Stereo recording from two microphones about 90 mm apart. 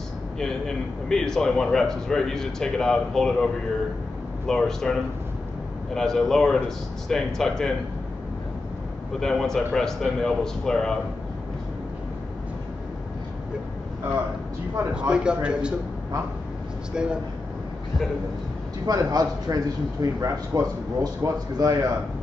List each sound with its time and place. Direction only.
0.4 s a man's voice: 5° left (ahead or behind)
4.5 s a man's voice: 5° left (ahead or behind)
5.9 s a man's voice: 5° left (ahead or behind)
9.2 s a man's voice: 5° left (ahead or behind)
14.9 s a man's voice: 10° right (ahead or behind)
16.9 s a man's voice: 10° right (ahead or behind)
18.9 s a man's voice: 45° right (ahead or behind)